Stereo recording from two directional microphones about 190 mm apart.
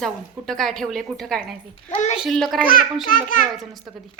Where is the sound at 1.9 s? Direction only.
40° left (ahead or behind).